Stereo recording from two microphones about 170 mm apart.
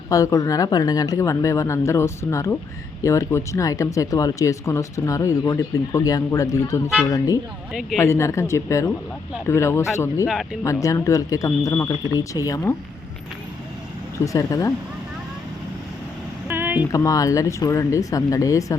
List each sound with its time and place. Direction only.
0.1 s speech: 20° left (ahead or behind)
7.7 s speech: centre (ahead or behind)
7.9 s speech: 15° left (ahead or behind)
10.2 s speech: 5° right (ahead or behind)
10.6 s speech: 20° left (ahead or behind)
14.3 s speech: 20° left (ahead or behind)
16.5 s a sound: 10° right (ahead or behind)
16.9 s speech: 20° left (ahead or behind)